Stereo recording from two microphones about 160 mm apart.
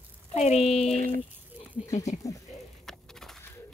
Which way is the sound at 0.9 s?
60° right (ahead or behind).